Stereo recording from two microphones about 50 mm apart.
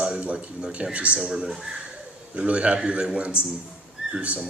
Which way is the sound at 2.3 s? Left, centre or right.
Right.